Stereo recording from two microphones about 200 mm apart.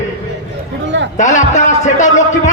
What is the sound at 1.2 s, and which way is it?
A man's voice, 40° left (ahead or behind).